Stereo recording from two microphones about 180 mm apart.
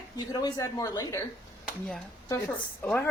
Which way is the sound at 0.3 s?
20° left (ahead or behind).